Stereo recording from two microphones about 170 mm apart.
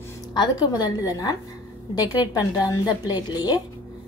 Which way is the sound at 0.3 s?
25° left (ahead or behind).